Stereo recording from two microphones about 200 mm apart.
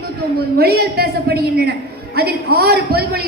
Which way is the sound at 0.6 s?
50° right (ahead or behind).